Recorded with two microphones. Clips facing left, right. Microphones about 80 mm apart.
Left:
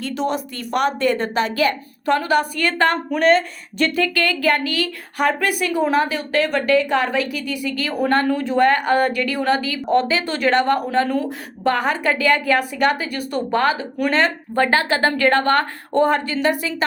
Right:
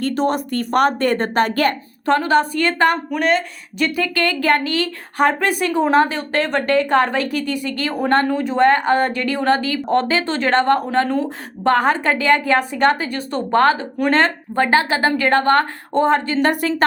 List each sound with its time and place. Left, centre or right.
0.0 s a woman's voice: right
2.0 s a woman's voice: right
3.1 s speech: centre
3.9 s a woman's voice: right
16.4 s a woman's voice: right